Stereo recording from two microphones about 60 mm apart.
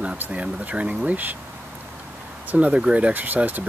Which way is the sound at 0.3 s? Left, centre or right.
Right.